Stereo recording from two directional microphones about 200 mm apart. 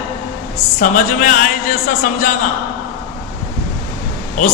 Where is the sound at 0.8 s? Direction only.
40° left (ahead or behind).